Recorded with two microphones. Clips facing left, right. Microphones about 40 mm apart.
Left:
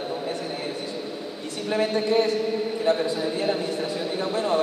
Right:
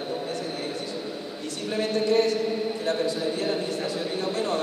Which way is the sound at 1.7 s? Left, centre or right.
Centre.